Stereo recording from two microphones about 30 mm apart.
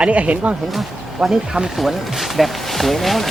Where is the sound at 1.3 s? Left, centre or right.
Right.